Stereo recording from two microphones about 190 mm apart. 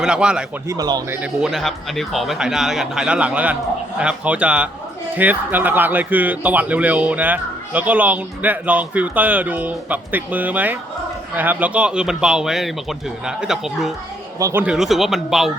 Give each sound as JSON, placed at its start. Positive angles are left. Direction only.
{"t": 0.0, "sound": "speech", "side_deg": -5}
{"t": 0.7, "sound": "speech", "side_deg": -20}
{"t": 1.2, "sound": "speech", "side_deg": 0}
{"t": 14.3, "sound": "speech", "side_deg": -15}